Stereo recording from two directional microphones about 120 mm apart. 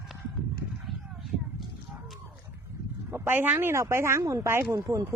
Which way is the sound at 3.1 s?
15° right (ahead or behind).